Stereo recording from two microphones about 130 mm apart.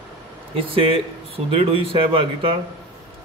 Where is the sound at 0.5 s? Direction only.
45° right (ahead or behind).